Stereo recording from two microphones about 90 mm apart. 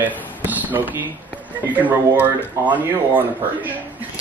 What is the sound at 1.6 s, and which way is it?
Speech, 20° right (ahead or behind).